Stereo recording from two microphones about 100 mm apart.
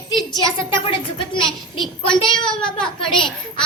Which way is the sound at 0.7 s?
60° left (ahead or behind).